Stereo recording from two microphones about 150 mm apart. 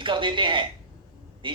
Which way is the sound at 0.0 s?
35° right (ahead or behind).